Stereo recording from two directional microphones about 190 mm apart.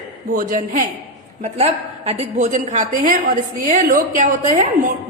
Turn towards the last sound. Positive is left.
turn(degrees=-40)  # may be behind; listen again after turning